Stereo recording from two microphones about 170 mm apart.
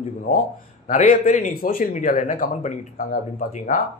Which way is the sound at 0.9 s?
50° left (ahead or behind).